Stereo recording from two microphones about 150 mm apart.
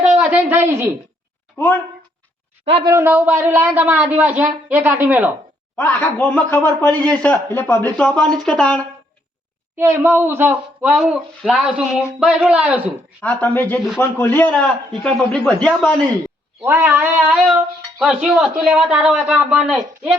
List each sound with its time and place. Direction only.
0.2 s speech: 10° right (ahead or behind)
1.5 s a man's voice: 15° left (ahead or behind)
2.6 s speech: 35° right (ahead or behind)
2.9 s a man's voice: 15° right (ahead or behind)
5.7 s a man's voice: 10° left (ahead or behind)
9.7 s a man's voice: 15° right (ahead or behind)
13.2 s a man's voice: 10° left (ahead or behind)
16.6 s a man's voice: 15° right (ahead or behind)